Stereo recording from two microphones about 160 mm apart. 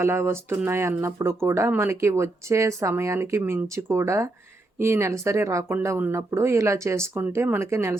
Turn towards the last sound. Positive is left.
turn(degrees=-15)  # may be behind; listen again after turning